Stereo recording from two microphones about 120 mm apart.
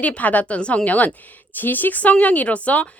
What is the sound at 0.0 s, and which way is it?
A woman's voice, 10° left (ahead or behind).